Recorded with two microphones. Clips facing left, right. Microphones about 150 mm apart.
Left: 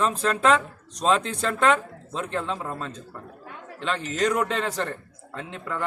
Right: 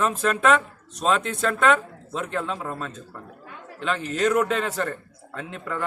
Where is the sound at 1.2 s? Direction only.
35° left (ahead or behind).